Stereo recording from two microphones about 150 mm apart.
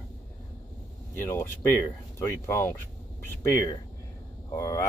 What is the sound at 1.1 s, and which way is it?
Speech, 15° left (ahead or behind).